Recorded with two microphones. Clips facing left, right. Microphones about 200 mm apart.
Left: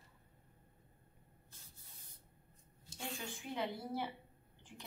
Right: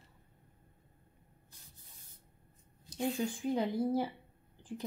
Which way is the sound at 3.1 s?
35° right (ahead or behind).